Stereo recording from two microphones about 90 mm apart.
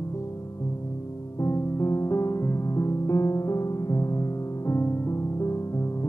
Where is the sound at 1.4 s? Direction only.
35° left (ahead or behind).